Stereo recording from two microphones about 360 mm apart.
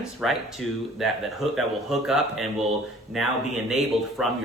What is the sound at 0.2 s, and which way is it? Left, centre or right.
Speech, centre.